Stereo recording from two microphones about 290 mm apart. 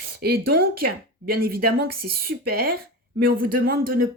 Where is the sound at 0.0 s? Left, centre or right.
Right.